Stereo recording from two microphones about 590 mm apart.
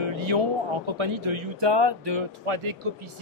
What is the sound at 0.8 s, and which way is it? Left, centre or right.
Speech, right.